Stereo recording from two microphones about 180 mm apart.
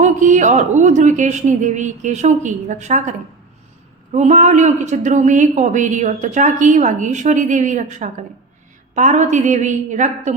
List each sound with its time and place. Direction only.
0.0 s speech: 45° right (ahead or behind)